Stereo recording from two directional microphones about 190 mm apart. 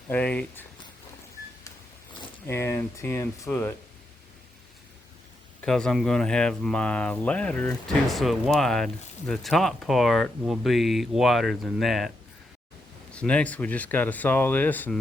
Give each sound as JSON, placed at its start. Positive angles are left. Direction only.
{"t": 0.1, "sound": "speech", "side_deg": 5}
{"t": 2.5, "sound": "speech", "side_deg": 10}
{"t": 5.6, "sound": "speech", "side_deg": 5}
{"t": 13.1, "sound": "speech", "side_deg": 5}